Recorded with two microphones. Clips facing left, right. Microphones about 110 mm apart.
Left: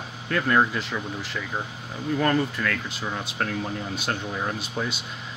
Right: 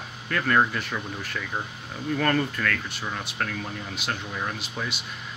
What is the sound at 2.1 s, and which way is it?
Speech, 20° left (ahead or behind).